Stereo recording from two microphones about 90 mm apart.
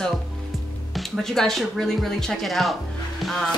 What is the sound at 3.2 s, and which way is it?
Music, centre (ahead or behind).